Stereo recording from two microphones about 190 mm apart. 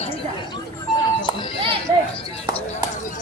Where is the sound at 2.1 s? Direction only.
30° left (ahead or behind).